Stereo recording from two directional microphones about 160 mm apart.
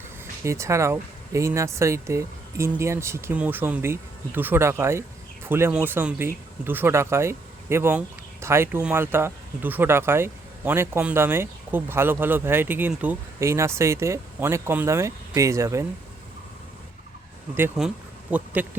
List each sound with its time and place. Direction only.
0.4 s speech: 15° right (ahead or behind)
17.7 s speech: 5° right (ahead or behind)